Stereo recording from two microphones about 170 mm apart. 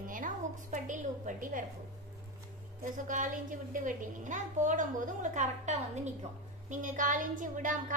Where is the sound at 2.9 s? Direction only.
50° right (ahead or behind).